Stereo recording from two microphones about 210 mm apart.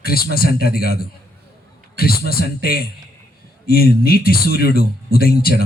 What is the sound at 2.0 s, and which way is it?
Speech, 45° left (ahead or behind).